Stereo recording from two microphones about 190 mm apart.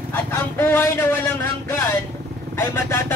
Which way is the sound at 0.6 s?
10° left (ahead or behind).